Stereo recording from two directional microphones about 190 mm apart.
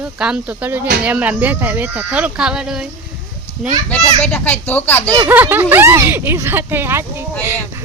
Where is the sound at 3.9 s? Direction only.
5° left (ahead or behind).